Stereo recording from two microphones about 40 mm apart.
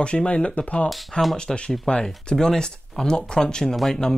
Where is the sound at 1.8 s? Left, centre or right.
Left.